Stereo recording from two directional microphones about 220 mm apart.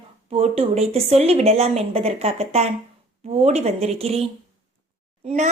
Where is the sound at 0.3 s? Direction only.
25° right (ahead or behind).